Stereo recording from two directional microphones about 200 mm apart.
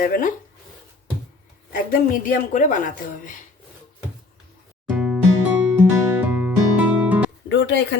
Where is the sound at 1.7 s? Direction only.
45° left (ahead or behind).